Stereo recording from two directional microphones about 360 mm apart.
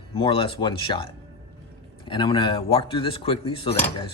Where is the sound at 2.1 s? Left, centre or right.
Centre.